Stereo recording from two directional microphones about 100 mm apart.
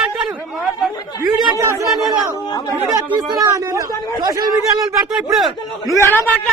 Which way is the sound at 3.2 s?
40° right (ahead or behind).